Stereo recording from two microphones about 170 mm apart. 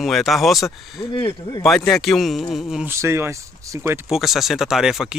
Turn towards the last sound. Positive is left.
turn(degrees=-5)  # may be behind; listen again after turning